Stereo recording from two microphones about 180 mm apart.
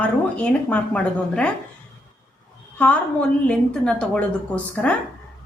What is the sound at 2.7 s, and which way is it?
A woman's voice, 5° left (ahead or behind).